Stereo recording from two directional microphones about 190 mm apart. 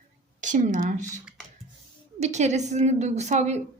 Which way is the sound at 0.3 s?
40° right (ahead or behind).